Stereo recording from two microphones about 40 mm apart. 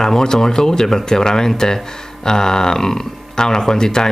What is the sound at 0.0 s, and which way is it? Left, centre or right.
Speech, centre.